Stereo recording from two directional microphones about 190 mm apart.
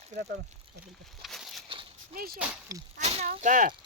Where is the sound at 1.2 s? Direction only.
Centre (ahead or behind).